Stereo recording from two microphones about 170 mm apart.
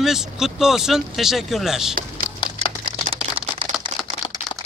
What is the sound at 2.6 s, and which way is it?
Typing, 40° right (ahead or behind).